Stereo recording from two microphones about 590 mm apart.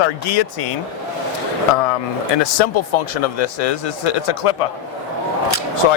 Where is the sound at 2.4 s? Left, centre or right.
Left.